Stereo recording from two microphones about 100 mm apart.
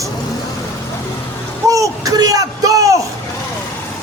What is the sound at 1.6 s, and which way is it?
Speech, 35° right (ahead or behind).